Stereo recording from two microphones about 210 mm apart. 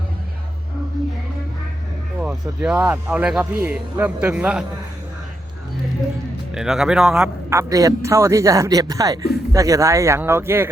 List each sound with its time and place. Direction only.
2.2 s speech: 5° right (ahead or behind)
6.5 s speech: centre (ahead or behind)
7.5 s speech: 15° right (ahead or behind)